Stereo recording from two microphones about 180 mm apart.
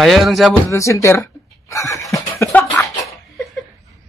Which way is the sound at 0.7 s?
15° left (ahead or behind).